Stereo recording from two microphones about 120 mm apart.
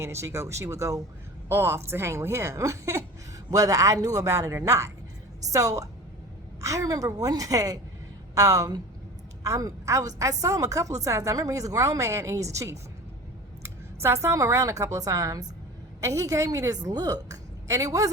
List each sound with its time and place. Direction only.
0.0 s a woman's voice: 25° right (ahead or behind)